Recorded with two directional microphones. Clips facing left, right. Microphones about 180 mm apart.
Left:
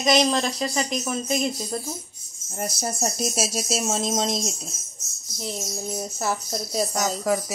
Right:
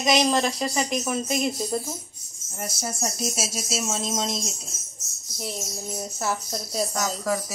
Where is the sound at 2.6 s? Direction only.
35° left (ahead or behind).